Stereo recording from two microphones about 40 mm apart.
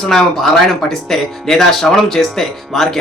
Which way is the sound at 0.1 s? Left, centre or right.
Centre.